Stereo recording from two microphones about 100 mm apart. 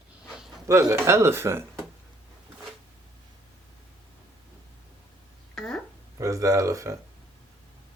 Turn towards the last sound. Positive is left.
turn(degrees=-30)  # may be behind; listen again after turning